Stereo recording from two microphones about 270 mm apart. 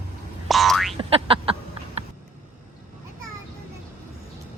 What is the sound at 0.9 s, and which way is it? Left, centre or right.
Boing, centre.